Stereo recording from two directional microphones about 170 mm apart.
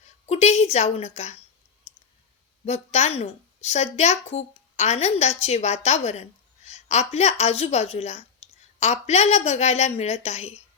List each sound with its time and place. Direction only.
0.3 s a woman's voice: 40° left (ahead or behind)
1.9 s clicking: 40° left (ahead or behind)
2.6 s a woman's voice: 40° left (ahead or behind)